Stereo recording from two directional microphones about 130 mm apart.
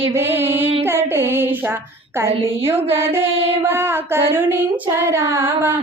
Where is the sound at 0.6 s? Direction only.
50° right (ahead or behind).